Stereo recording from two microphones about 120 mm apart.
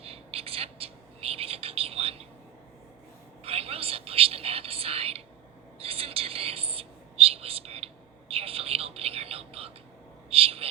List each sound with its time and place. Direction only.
0.0 s whispering: 55° right (ahead or behind)
3.4 s whispering: 55° right (ahead or behind)
8.3 s a sound: 55° right (ahead or behind)